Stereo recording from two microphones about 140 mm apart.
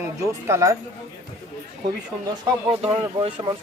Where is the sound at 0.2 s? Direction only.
20° right (ahead or behind).